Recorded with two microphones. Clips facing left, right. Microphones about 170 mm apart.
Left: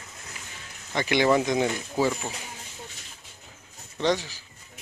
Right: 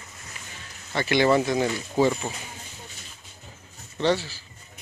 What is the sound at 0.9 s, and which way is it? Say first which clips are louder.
Speech: right 1 dB; 15° left (ahead or behind).